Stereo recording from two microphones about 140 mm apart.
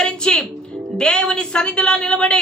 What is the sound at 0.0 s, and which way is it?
A woman's voice, 5° left (ahead or behind).